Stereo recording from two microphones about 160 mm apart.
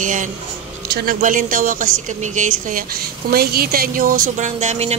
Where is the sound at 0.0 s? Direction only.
50° right (ahead or behind).